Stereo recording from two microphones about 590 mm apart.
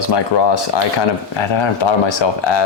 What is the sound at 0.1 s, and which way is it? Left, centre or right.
Speech, left.